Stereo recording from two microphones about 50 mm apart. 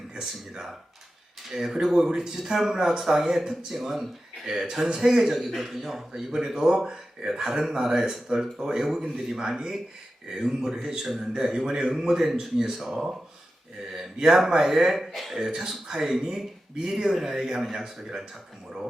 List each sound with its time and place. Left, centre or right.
0.1 s speech: centre